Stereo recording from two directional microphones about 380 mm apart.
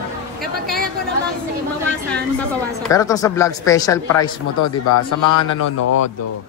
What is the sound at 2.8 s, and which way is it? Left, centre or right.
A man's voice, centre.